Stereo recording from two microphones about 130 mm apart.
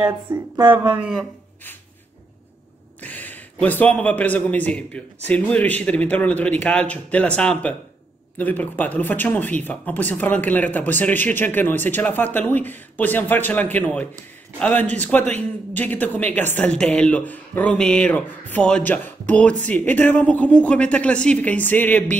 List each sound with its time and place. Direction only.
0.3 s speech: 35° right (ahead or behind)
3.0 s speech: 10° left (ahead or behind)